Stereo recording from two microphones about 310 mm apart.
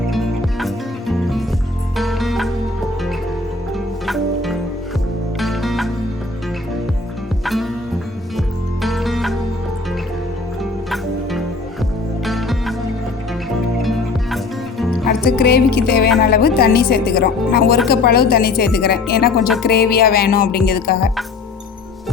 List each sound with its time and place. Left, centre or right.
0.6 s music: centre
4.0 s music: centre
7.4 s music: centre
10.6 s music: centre
13.8 s music: centre
15.0 s music: left
16.2 s speech: left